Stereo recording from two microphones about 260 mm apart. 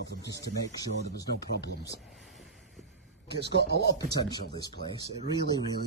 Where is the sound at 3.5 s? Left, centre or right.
Left.